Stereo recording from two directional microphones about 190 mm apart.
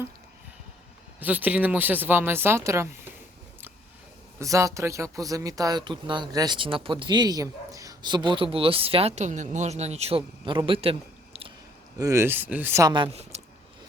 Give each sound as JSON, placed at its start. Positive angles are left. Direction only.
{"t": 1.2, "sound": "speech", "side_deg": -10}
{"t": 4.4, "sound": "speech", "side_deg": -15}
{"t": 11.9, "sound": "speech", "side_deg": -15}
{"t": 12.9, "sound": "speech", "side_deg": -30}